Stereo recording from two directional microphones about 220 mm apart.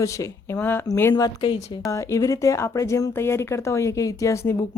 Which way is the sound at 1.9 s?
15° left (ahead or behind).